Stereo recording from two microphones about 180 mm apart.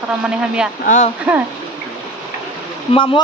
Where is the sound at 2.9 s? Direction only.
30° left (ahead or behind).